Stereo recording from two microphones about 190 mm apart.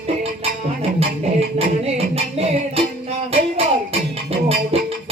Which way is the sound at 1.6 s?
35° right (ahead or behind).